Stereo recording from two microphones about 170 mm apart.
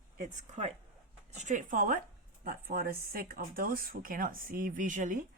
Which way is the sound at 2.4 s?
60° right (ahead or behind).